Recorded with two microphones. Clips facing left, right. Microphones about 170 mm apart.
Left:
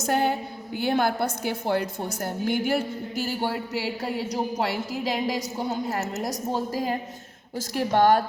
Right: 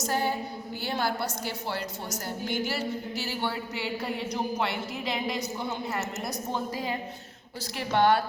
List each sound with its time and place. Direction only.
0.0 s female singing: 60° left (ahead or behind)
0.8 s a woman's voice: 55° left (ahead or behind)